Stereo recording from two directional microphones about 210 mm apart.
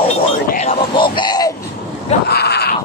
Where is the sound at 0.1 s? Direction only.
30° left (ahead or behind).